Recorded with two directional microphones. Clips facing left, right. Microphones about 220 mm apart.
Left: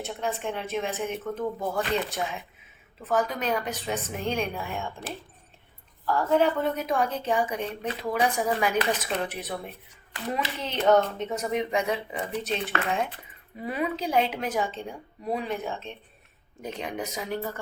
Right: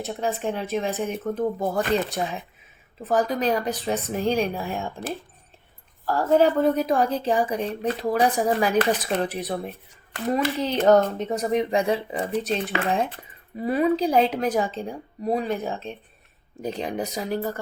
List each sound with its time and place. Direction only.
0.0 s speech: 40° right (ahead or behind)